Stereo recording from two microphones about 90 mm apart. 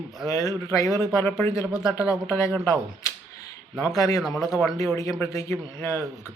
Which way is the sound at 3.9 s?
40° left (ahead or behind).